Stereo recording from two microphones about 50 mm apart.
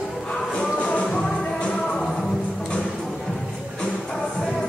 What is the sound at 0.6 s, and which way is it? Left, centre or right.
Music, centre.